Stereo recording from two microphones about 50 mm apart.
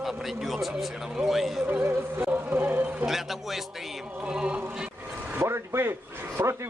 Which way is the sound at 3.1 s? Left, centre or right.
Centre.